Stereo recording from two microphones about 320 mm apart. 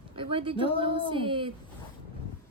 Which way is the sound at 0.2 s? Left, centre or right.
Centre.